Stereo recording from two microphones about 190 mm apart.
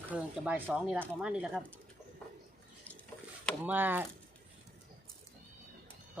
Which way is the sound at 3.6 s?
10° right (ahead or behind).